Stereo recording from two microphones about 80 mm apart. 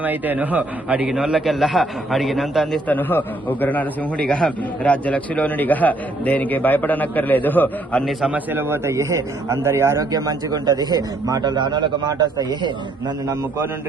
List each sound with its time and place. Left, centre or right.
0.0 s a man's voice: right; by 2.8 s centre
2.8 s a man's voice: left
8.3 s a man's voice: right
10.0 s speech: right
11.5 s a man's voice: right